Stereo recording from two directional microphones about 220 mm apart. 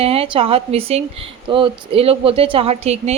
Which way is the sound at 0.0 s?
25° right (ahead or behind).